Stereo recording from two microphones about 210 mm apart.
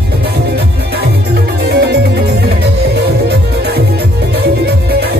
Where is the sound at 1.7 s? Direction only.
50° right (ahead or behind).